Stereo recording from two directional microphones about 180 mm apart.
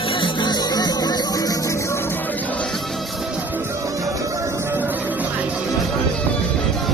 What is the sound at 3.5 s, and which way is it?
Music, 15° right (ahead or behind).